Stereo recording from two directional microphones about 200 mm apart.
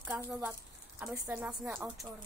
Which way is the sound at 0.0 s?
5° right (ahead or behind).